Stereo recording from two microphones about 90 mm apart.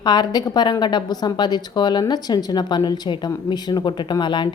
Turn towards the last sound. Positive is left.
turn(degrees=60)  # may be behind; listen again after turning